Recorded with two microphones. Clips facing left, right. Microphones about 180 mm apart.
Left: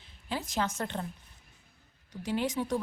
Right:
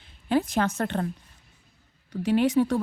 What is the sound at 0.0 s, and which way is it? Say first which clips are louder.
A woman's voice: right 12 dB; 60° right (ahead or behind).